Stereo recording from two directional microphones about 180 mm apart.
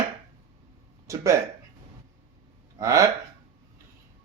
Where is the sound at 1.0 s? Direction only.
15° right (ahead or behind).